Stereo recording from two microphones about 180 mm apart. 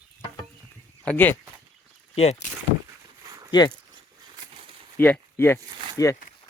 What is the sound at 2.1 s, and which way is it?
Speech, 35° left (ahead or behind).